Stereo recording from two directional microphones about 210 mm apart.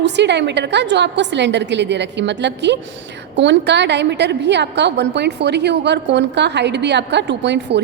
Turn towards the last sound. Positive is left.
turn(degrees=-55)  # may be behind; listen again after turning